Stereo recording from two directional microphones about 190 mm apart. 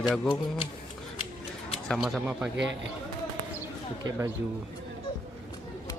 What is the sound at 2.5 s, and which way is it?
Speech, 75° right (ahead or behind).